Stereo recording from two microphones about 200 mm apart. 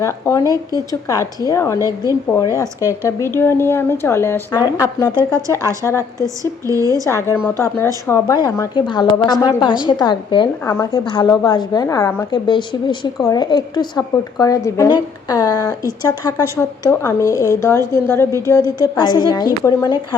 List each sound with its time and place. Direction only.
0.0 s a woman's voice: 15° left (ahead or behind)
6.4 s speech: 15° right (ahead or behind)
7.1 s a woman's voice: 15° left (ahead or behind)